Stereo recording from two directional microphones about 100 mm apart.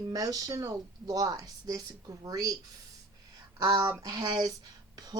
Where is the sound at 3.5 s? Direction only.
35° right (ahead or behind).